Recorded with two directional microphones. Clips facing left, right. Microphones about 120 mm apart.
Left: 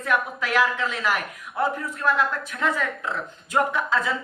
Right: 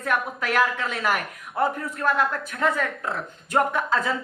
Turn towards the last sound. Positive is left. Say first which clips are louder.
# right 1 dB
turn(degrees=-45)  # may be behind; listen again after turning